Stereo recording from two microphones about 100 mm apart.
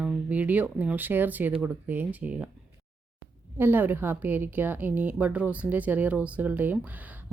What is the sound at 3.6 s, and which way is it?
A woman's voice, 20° right (ahead or behind).